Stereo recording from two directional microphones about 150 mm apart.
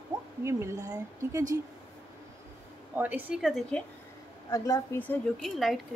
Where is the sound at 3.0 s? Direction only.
10° right (ahead or behind).